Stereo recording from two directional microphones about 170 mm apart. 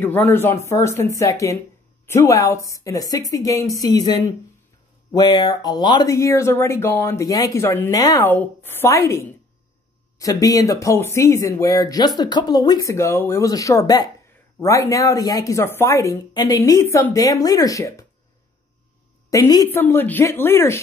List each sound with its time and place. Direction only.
0.0 s speech: 10° left (ahead or behind)
19.3 s speech: 20° left (ahead or behind)